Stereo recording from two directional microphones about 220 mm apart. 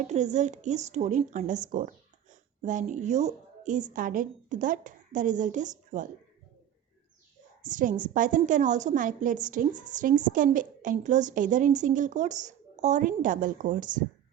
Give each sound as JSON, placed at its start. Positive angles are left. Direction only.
{"t": 0.0, "sound": "a woman's voice", "side_deg": -30}
{"t": 7.6, "sound": "a woman's voice", "side_deg": -35}